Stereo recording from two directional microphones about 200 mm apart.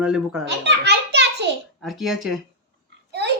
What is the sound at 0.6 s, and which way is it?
Children playing, 60° right (ahead or behind).